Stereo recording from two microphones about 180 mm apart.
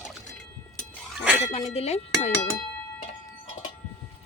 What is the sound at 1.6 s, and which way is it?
Speech, 35° left (ahead or behind).